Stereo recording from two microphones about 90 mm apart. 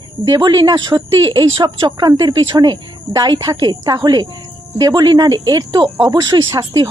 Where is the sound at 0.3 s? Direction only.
50° right (ahead or behind).